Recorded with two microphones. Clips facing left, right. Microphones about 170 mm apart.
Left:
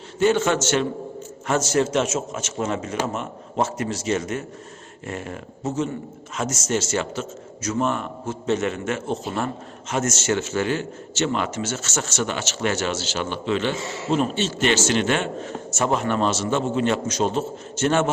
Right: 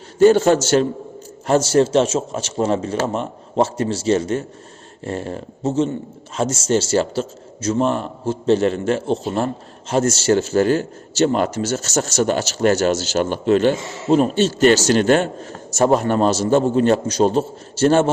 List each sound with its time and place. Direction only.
0.2 s a man's voice: 35° right (ahead or behind)